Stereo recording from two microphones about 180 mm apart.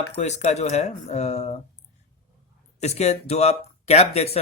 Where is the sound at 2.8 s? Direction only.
35° left (ahead or behind).